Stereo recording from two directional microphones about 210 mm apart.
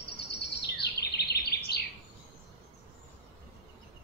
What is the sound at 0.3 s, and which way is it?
Bird vocalization, 50° left (ahead or behind).